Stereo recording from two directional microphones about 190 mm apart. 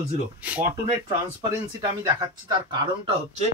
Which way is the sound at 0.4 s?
10° right (ahead or behind).